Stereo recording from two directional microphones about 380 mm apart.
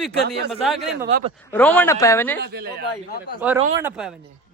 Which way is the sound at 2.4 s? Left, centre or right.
Right.